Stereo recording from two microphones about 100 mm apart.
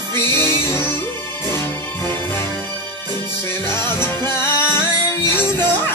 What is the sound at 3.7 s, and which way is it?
Music, 25° left (ahead or behind).